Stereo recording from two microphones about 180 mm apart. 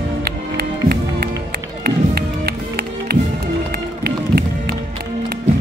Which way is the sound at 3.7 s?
55° right (ahead or behind).